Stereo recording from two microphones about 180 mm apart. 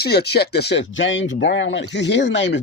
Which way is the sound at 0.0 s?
60° left (ahead or behind).